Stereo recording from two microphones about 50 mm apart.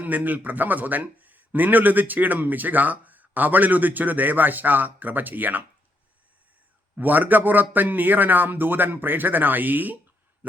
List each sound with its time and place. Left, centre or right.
0.0 s a man's voice: right
6.9 s a man's voice: right